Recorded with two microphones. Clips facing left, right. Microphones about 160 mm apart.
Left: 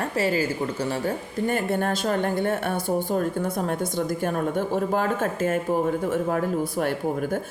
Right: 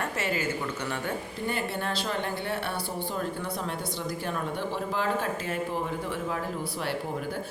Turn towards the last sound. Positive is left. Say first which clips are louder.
# left 7 dB
turn(degrees=50)  # may be behind; listen again after turning